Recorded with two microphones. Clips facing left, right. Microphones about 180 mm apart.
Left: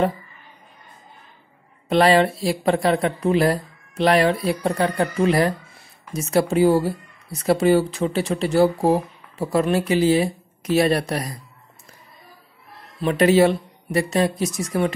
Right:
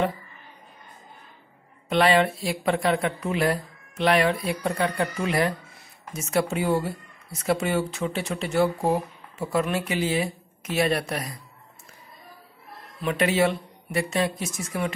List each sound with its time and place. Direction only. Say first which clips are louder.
1.9 s speech: left 4 dB; 35° left (ahead or behind)
13.0 s speech: left 7 dB; 35° left (ahead or behind)